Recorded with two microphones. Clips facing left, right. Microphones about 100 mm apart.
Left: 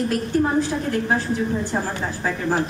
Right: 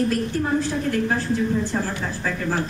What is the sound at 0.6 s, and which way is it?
A man's voice, 15° left (ahead or behind).